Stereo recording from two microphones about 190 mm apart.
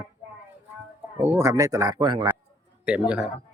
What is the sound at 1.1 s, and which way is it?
Speech, 10° right (ahead or behind).